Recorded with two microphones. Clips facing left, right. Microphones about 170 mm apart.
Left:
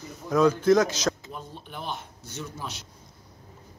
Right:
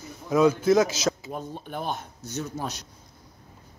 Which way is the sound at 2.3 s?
40° right (ahead or behind).